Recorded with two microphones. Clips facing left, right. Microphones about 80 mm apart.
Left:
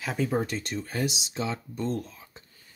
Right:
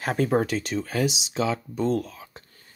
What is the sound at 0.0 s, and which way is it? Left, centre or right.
Speech, right.